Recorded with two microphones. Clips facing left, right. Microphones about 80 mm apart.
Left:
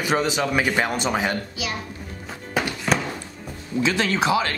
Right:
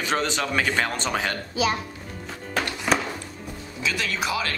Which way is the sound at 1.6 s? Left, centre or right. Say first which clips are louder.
Right 7 dB; right.